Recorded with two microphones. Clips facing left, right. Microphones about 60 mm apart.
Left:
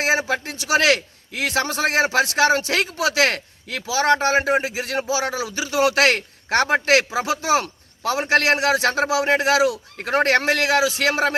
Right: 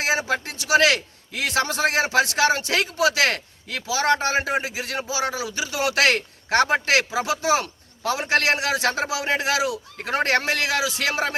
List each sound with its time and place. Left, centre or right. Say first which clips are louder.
0.0 s speech: left 2 dB; left